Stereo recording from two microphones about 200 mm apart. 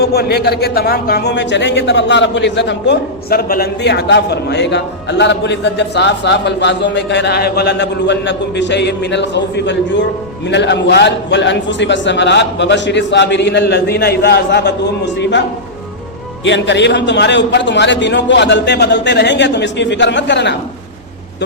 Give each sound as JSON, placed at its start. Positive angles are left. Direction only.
{"t": 0.0, "sound": "a man's voice", "side_deg": 55}